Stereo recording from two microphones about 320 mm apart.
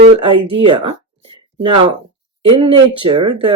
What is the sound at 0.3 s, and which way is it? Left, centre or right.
Speech, centre.